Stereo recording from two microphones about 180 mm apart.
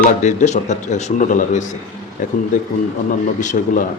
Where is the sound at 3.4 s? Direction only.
45° left (ahead or behind).